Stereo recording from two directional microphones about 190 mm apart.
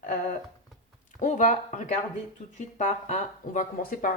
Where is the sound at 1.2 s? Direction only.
40° left (ahead or behind).